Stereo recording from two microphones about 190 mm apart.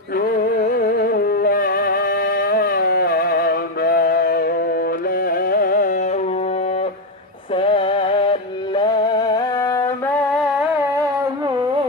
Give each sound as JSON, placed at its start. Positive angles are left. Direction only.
{"t": 0.8, "sound": "music", "side_deg": 50}
{"t": 5.3, "sound": "carnatic music", "side_deg": 50}
{"t": 7.5, "sound": "music", "side_deg": 30}